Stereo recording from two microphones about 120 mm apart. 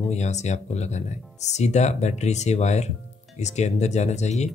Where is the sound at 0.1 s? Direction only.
70° left (ahead or behind).